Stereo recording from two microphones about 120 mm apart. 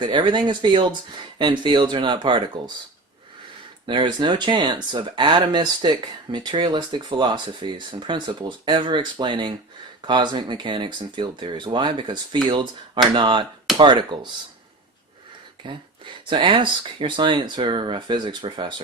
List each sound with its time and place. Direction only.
0.0 s speech: 40° right (ahead or behind)
3.8 s speech: 40° right (ahead or behind)
15.6 s speech: 40° right (ahead or behind)